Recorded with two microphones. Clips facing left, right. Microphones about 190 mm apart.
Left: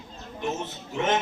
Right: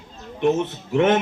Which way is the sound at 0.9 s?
60° right (ahead or behind).